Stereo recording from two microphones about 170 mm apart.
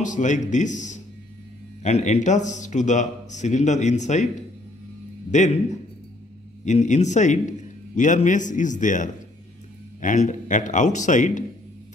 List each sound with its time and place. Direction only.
0.0 s a man's voice: 45° left (ahead or behind)